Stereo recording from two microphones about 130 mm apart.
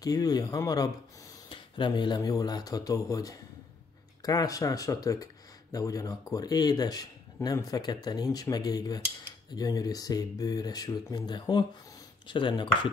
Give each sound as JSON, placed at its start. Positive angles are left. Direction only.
{"t": 0.0, "sound": "speech", "side_deg": 30}